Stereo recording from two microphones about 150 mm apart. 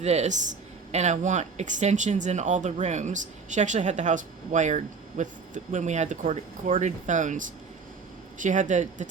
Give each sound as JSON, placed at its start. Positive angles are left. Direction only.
{"t": 0.0, "sound": "speech", "side_deg": -50}